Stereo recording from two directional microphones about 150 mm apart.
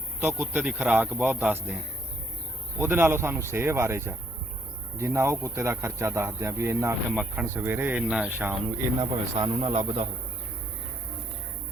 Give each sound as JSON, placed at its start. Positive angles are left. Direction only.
{"t": 0.3, "sound": "a man's voice", "side_deg": -10}
{"t": 9.0, "sound": "speech", "side_deg": -30}